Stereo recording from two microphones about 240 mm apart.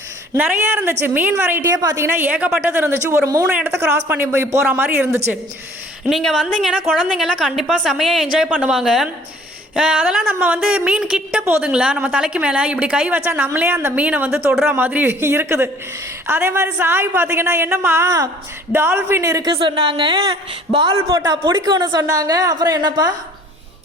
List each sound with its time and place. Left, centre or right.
0.3 s a woman's voice: centre